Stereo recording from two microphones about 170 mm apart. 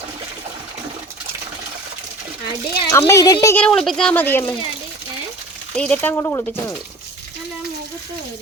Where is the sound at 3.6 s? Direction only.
5° left (ahead or behind).